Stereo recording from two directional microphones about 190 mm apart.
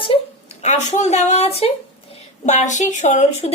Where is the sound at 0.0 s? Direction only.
30° left (ahead or behind).